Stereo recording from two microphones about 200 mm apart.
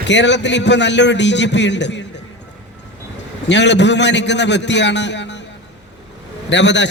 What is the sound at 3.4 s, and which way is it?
A man's voice, 60° left (ahead or behind).